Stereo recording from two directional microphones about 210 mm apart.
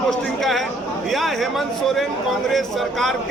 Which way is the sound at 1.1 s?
Centre (ahead or behind).